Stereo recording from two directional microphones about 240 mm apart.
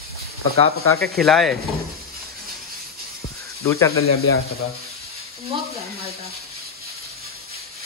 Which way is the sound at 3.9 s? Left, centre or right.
Left.